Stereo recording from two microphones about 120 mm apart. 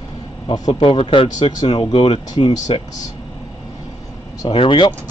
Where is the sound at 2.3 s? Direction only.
35° left (ahead or behind).